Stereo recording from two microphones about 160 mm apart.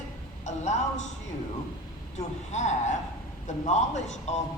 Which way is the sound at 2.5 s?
45° left (ahead or behind).